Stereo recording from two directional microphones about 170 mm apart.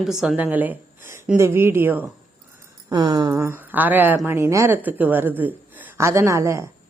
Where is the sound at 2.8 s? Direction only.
25° right (ahead or behind).